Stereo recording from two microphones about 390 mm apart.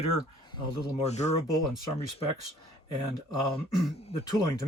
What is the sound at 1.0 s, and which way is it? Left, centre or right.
Speech, centre.